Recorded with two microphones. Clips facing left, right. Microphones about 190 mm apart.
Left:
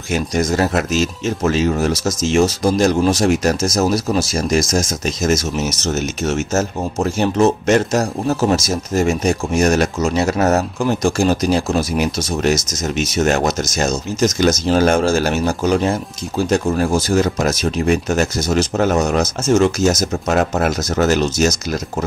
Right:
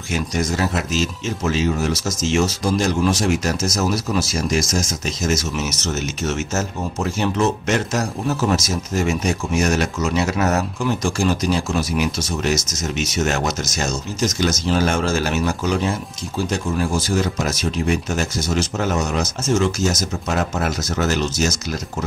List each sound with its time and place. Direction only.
0.1 s speech: 50° left (ahead or behind)
2.4 s speech: 35° left (ahead or behind)
18.1 s speech: 60° left (ahead or behind)
18.6 s speech: 50° left (ahead or behind)